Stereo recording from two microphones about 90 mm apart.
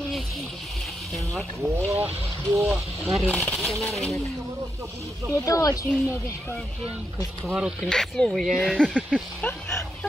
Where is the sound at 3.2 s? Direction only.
15° left (ahead or behind).